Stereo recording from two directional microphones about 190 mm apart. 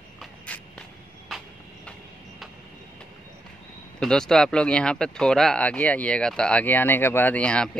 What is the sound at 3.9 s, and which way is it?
Speech, 5° left (ahead or behind).